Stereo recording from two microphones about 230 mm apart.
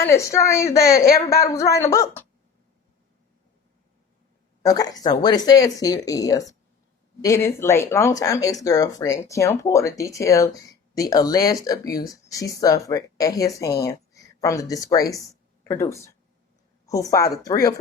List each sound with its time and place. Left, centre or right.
0.0 s speech: centre
4.6 s speech: centre